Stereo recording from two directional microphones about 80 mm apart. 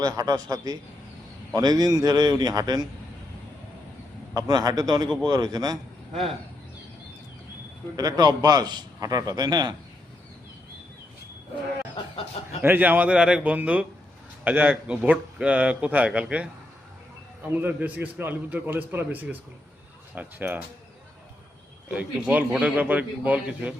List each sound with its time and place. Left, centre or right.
0.0 s a man's voice: right
4.4 s a man's voice: right
7.9 s a man's voice: right
12.6 s a man's voice: right
17.5 s a man's voice: right
21.8 s a man's voice: centre